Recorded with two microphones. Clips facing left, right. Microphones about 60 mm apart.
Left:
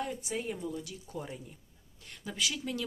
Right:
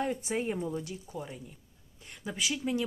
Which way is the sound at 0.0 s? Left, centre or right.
Right.